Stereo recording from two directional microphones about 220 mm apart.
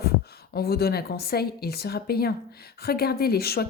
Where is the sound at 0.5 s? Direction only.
45° left (ahead or behind).